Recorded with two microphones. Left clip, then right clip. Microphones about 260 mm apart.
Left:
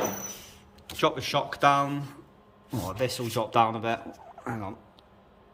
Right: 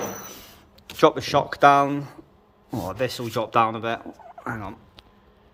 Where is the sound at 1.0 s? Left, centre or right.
Centre.